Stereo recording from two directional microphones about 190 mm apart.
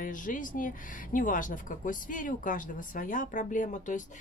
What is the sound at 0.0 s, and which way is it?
Speech, 45° left (ahead or behind).